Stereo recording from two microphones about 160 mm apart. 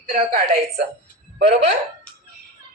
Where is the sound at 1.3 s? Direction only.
90° right.